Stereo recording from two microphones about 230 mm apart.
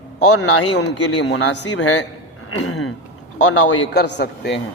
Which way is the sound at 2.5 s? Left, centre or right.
Left.